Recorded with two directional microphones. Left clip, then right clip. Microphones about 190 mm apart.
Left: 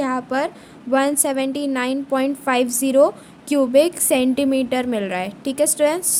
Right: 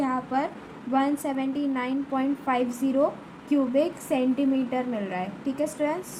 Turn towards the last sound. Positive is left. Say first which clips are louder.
# left 9 dB
turn(degrees=60)  # may be behind; listen again after turning